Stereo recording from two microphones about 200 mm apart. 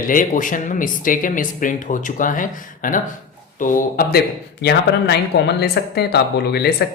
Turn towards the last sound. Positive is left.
turn(degrees=55)  # may be behind; listen again after turning